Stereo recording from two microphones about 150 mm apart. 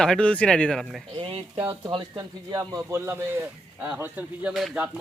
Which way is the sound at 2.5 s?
20° right (ahead or behind).